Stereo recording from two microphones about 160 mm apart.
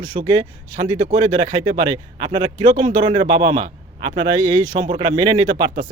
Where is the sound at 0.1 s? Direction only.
30° right (ahead or behind).